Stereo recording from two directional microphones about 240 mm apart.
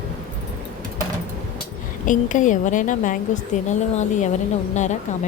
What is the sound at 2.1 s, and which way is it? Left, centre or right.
A woman's voice, left.